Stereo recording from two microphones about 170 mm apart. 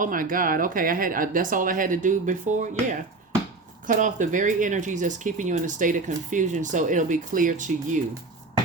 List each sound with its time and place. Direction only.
0.0 s speech: 55° right (ahead or behind)
3.8 s speech: 50° right (ahead or behind)